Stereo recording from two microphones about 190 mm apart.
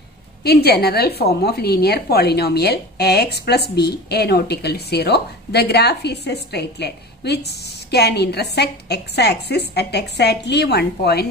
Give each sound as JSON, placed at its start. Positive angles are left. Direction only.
{"t": 0.4, "sound": "a woman's voice", "side_deg": 55}